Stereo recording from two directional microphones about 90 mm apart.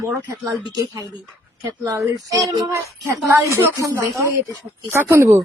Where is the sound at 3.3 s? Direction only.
30° right (ahead or behind).